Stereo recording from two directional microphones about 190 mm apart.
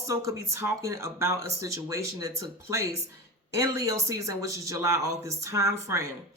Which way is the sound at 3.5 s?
15° right (ahead or behind).